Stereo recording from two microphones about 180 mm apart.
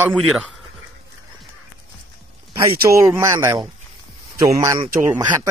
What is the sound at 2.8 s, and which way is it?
Speech, 15° right (ahead or behind).